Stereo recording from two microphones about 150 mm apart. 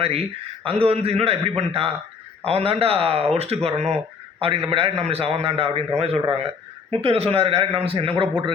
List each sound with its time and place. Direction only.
0.0 s a man's voice: 40° right (ahead or behind)